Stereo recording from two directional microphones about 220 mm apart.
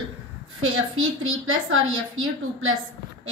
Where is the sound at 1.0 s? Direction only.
65° right (ahead or behind).